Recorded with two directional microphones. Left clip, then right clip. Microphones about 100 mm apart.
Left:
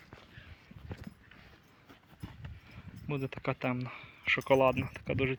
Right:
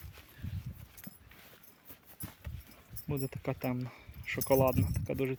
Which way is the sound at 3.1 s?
35° right (ahead or behind).